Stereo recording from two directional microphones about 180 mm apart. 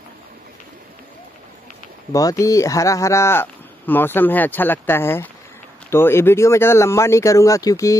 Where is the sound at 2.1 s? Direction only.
20° left (ahead or behind).